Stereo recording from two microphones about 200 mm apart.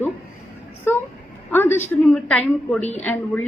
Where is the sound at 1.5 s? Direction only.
10° left (ahead or behind).